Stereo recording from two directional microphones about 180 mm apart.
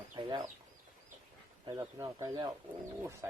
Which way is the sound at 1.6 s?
20° right (ahead or behind).